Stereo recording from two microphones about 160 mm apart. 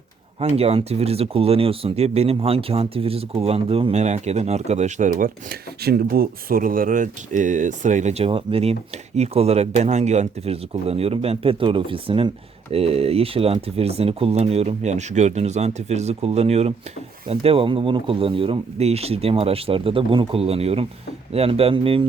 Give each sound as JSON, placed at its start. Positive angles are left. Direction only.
{"t": 0.3, "sound": "speech", "side_deg": -40}